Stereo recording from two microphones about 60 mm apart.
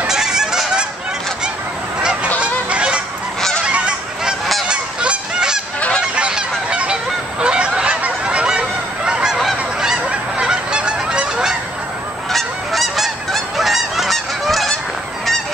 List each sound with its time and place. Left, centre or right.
0.0 s goose: centre
2.4 s goose: centre
9.8 s honk: centre
10.3 s goose: centre
12.3 s goose: centre